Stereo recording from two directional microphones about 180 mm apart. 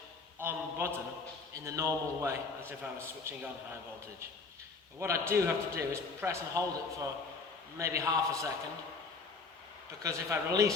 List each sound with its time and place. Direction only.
0.3 s a sound: 10° right (ahead or behind)
1.5 s a man's voice: 15° right (ahead or behind)
4.9 s a man's voice: 15° right (ahead or behind)
10.0 s a man's voice: 15° right (ahead or behind)